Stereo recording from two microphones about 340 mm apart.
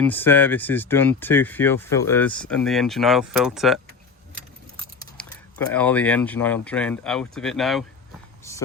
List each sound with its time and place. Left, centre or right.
0.0 s speech: centre
4.9 s speech: centre